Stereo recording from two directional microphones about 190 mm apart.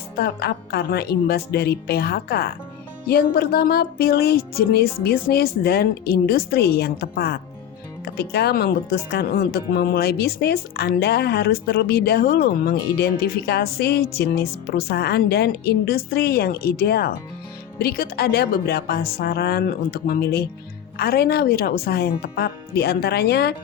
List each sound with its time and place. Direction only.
0.2 s speech: 60° left (ahead or behind)